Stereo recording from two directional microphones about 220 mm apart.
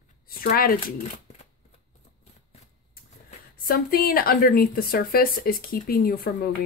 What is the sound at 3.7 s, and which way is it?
Speech, 45° left (ahead or behind).